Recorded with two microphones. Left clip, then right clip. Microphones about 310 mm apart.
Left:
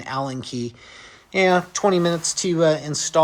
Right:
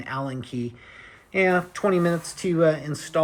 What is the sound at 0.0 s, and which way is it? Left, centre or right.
Speech, centre.